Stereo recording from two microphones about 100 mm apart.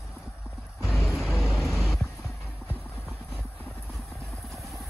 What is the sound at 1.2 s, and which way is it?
Vehicle, centre (ahead or behind).